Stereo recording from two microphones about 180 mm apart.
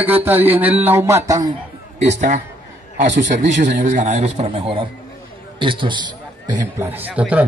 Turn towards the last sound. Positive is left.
turn(degrees=-10)  # may be behind; listen again after turning